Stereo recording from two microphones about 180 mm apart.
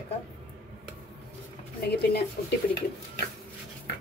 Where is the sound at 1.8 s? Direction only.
65° left (ahead or behind).